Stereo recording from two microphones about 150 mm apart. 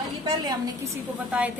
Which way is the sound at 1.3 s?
10° right (ahead or behind).